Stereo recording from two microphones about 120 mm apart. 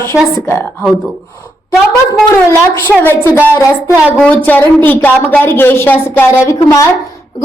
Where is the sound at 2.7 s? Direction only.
25° left (ahead or behind).